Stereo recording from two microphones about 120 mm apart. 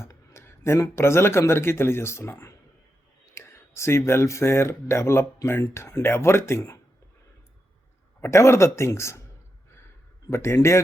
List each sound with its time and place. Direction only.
0.0 s speech: 20° left (ahead or behind)
8.2 s speech: 20° left (ahead or behind)
10.2 s speech: 20° left (ahead or behind)